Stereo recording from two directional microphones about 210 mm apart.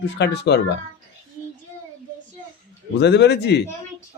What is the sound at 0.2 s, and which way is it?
Speech, 55° left (ahead or behind).